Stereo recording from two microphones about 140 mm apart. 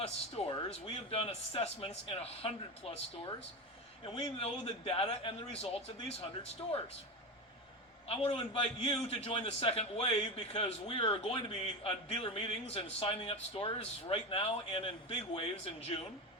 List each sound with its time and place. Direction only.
0.4 s a man's voice: 40° left (ahead or behind)
8.0 s a man's voice: 45° left (ahead or behind)